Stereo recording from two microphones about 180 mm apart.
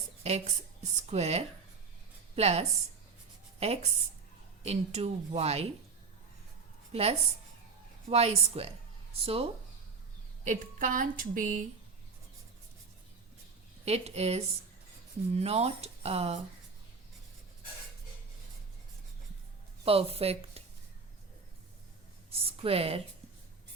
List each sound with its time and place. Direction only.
0.2 s a woman's voice: 35° right (ahead or behind)
6.9 s speech: 35° right (ahead or behind)
10.4 s a woman's voice: 45° right (ahead or behind)
13.8 s speech: 35° right (ahead or behind)
19.8 s speech: 30° right (ahead or behind)
22.3 s a sound: 35° right (ahead or behind)